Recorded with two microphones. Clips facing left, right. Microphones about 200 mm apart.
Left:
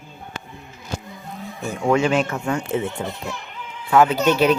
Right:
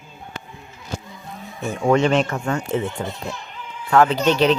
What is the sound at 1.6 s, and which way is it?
A man's voice, centre (ahead or behind).